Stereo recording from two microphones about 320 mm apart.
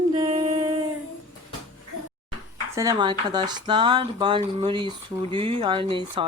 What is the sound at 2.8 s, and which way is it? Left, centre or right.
Speech, centre.